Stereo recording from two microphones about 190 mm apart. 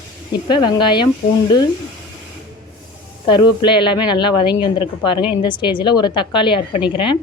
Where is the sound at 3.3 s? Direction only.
25° left (ahead or behind).